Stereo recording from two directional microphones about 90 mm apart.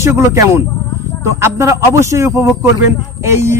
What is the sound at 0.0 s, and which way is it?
Speech, 30° right (ahead or behind).